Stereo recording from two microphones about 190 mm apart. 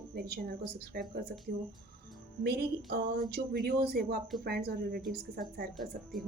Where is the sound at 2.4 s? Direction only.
55° right (ahead or behind).